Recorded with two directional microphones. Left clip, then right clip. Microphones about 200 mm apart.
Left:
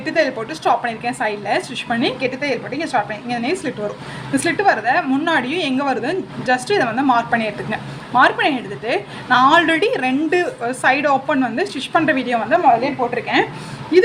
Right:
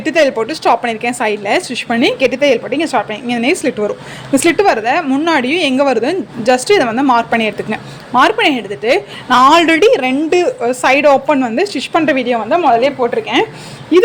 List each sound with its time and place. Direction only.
0.0 s a woman's voice: 35° right (ahead or behind)